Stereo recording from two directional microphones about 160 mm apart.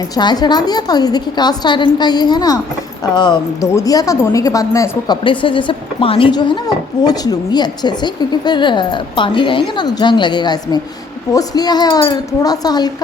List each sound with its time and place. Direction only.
0.1 s a woman's voice: 25° left (ahead or behind)
5.2 s a woman's voice: 30° left (ahead or behind)